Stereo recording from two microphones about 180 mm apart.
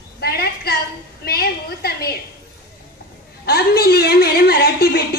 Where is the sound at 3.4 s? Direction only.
60° left (ahead or behind).